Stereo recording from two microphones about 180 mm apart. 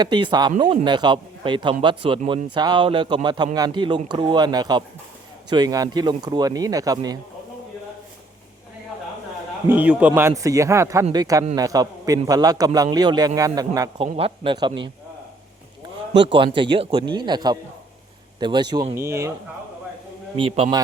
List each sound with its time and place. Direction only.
0.0 s a man's voice: 25° right (ahead or behind)
9.6 s a man's voice: 10° right (ahead or behind)
14.0 s a man's voice: 30° right (ahead or behind)
16.2 s a man's voice: 30° right (ahead or behind)
20.3 s a man's voice: 30° right (ahead or behind)